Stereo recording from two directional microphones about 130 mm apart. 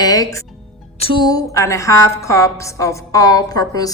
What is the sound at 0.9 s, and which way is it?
Music, 50° left (ahead or behind).